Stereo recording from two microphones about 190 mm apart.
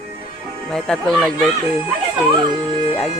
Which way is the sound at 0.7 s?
5° left (ahead or behind).